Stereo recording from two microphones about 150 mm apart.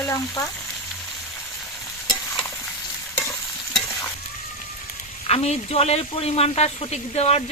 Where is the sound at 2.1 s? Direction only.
Centre (ahead or behind).